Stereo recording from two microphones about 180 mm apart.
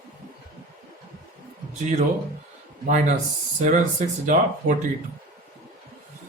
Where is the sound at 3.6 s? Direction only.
40° right (ahead or behind).